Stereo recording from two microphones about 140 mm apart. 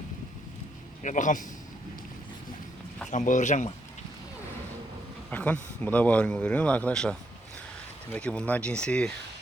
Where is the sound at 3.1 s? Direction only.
60° left (ahead or behind).